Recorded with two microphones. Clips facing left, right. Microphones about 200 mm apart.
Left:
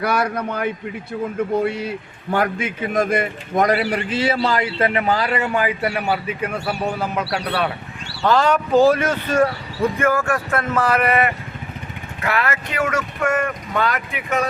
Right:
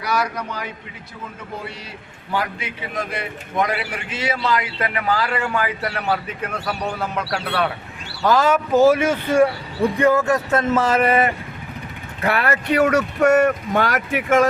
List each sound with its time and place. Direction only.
0.0 s a man's voice: 55° left (ahead or behind); by 7.7 s 5° left (ahead or behind)
8.2 s speech: 5° right (ahead or behind); by 13.5 s 40° right (ahead or behind)